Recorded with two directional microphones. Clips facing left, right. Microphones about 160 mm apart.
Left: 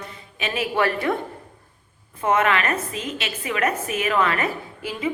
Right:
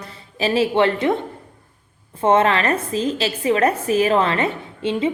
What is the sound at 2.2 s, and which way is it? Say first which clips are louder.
A woman's voice: right 4 dB; 30° right (ahead or behind).